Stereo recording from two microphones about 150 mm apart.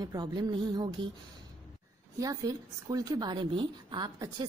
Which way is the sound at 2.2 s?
25° right (ahead or behind).